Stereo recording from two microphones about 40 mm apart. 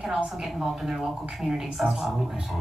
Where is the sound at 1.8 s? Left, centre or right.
Centre.